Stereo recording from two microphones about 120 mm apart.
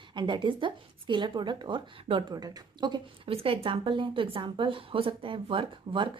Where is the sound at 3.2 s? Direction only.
50° right (ahead or behind).